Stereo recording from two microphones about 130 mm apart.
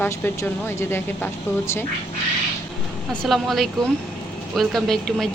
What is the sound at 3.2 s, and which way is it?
A woman's voice, centre (ahead or behind).